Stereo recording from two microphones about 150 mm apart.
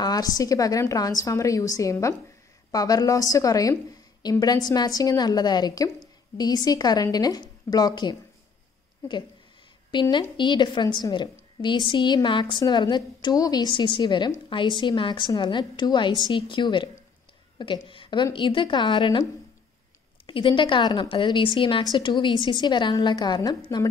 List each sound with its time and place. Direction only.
0.0 s a woman's voice: 25° left (ahead or behind)
10.0 s a woman's voice: 25° left (ahead or behind)
20.2 s a woman's voice: 35° left (ahead or behind)